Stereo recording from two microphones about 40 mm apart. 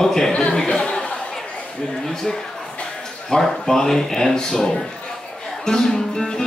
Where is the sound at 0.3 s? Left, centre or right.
Left.